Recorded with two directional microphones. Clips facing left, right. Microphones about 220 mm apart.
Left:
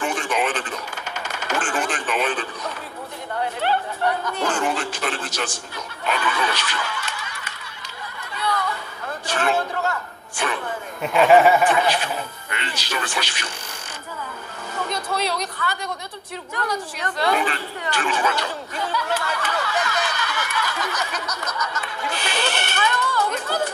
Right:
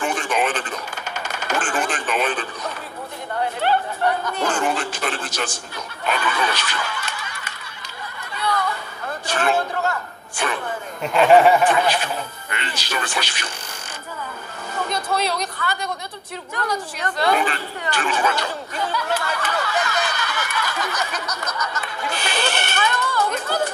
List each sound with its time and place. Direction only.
0.0 s radio: 45° right (ahead or behind)
1.1 s a sound: 45° right (ahead or behind)
3.6 s speech: 45° right (ahead or behind)
6.0 s snicker: 45° right (ahead or behind)
8.4 s a sound: 45° right (ahead or behind)
11.0 s speech: centre (ahead or behind)
12.4 s speech: 45° right (ahead or behind)
14.9 s a woman's voice: 45° right (ahead or behind)